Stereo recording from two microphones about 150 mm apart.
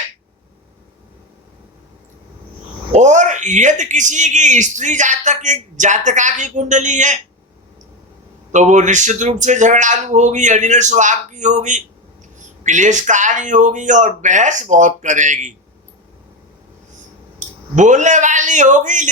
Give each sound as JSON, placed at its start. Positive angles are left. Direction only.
{"t": 2.9, "sound": "speech", "side_deg": -55}
{"t": 8.5, "sound": "speech", "side_deg": -50}
{"t": 17.4, "sound": "a sound", "side_deg": -55}
{"t": 17.7, "sound": "speech", "side_deg": -55}